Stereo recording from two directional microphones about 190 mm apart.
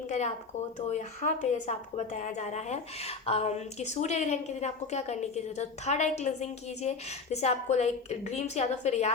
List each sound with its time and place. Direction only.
0.9 s a woman's voice: 40° left (ahead or behind)